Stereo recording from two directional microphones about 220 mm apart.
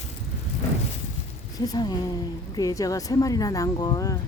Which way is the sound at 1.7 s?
20° left (ahead or behind).